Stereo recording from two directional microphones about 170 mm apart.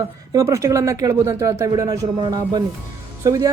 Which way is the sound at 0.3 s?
15° right (ahead or behind).